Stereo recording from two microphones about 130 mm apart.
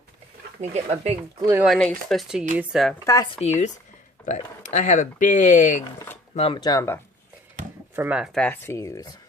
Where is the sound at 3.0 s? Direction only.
25° left (ahead or behind).